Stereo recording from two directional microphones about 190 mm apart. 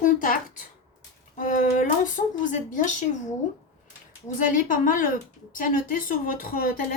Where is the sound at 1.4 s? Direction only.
45° left (ahead or behind).